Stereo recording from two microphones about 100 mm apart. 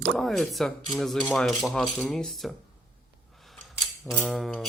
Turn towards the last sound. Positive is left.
turn(degrees=0)  # may be behind; listen again after turning